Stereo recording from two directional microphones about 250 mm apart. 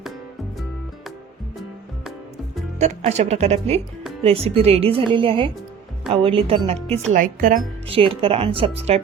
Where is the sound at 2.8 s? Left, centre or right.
Right.